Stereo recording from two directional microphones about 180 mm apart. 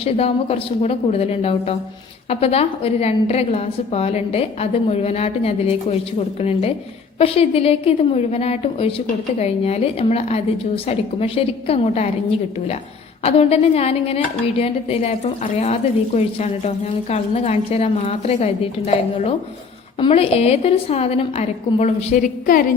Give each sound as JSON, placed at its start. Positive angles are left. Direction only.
{"t": 0.0, "sound": "a woman's voice", "side_deg": 35}
{"t": 20.0, "sound": "a woman's voice", "side_deg": 35}